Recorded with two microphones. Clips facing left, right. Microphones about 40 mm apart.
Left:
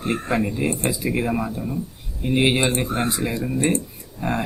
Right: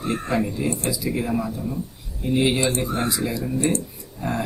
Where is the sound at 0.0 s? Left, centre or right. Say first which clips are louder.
Left 1 dB; left.